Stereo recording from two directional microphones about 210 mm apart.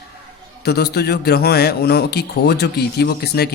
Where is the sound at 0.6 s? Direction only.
50° left (ahead or behind).